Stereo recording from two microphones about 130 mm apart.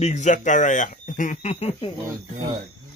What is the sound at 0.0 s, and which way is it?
Speech, 65° left (ahead or behind).